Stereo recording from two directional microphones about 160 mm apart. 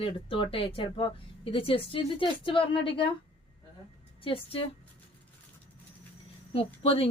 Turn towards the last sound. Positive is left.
turn(degrees=35)  # may be behind; listen again after turning